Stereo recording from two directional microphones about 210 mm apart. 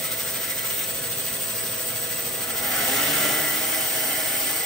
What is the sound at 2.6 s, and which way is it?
Vehicle, centre (ahead or behind).